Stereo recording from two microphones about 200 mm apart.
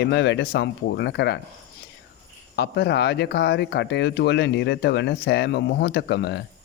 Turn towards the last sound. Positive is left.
turn(degrees=55)  # may be behind; listen again after turning